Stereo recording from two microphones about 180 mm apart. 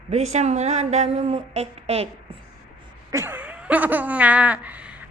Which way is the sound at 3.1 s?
10° right (ahead or behind).